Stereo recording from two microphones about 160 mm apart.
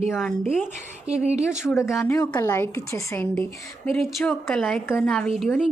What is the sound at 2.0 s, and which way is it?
A woman's voice, 20° left (ahead or behind).